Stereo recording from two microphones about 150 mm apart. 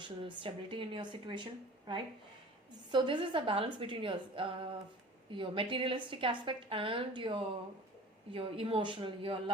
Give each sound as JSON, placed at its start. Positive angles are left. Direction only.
{"t": 0.0, "sound": "a woman's voice", "side_deg": -35}
{"t": 2.9, "sound": "a woman's voice", "side_deg": -30}